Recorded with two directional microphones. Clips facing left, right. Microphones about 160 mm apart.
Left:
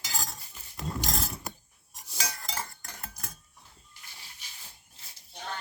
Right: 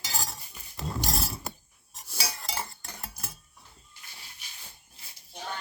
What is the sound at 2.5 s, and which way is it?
Cutlery, 15° right (ahead or behind).